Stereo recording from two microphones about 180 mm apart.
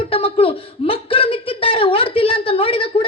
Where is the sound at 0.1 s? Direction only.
30° left (ahead or behind).